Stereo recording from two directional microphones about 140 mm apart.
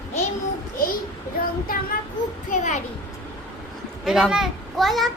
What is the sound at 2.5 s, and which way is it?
Speech, 60° left (ahead or behind).